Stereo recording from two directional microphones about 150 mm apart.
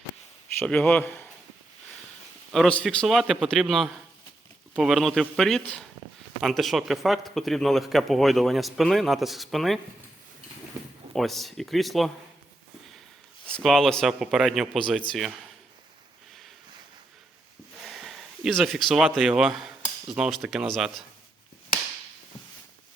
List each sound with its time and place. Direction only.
0.6 s a man's voice: 10° left (ahead or behind)
2.5 s a man's voice: 5° left (ahead or behind)
6.0 s a sound: 45° right (ahead or behind)
6.4 s a man's voice: centre (ahead or behind)
11.1 s a man's voice: centre (ahead or behind)
13.5 s a man's voice: centre (ahead or behind)
17.8 s speech: centre (ahead or behind)